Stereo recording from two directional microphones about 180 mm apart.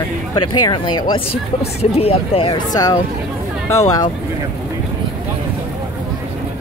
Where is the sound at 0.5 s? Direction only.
25° left (ahead or behind).